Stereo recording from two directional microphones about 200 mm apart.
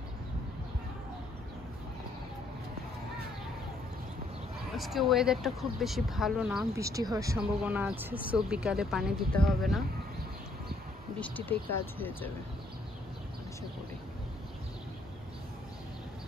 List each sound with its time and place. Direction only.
4.7 s speech: centre (ahead or behind)
6.7 s speech: 15° right (ahead or behind); by 9.8 s centre (ahead or behind)
11.1 s speech: 10° left (ahead or behind)